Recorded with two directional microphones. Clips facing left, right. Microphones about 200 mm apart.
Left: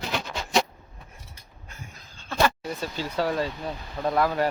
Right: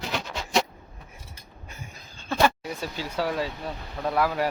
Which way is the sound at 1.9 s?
10° right (ahead or behind).